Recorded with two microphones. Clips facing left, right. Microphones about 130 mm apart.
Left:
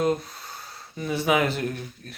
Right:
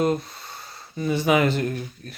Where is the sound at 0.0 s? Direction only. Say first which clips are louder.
Right 2 dB; centre (ahead or behind).